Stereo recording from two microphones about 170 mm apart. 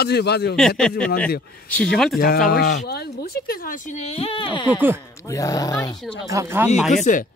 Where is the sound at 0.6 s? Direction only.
5° left (ahead or behind).